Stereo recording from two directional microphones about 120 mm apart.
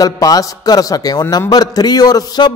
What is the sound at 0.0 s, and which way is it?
A man's voice, 30° left (ahead or behind).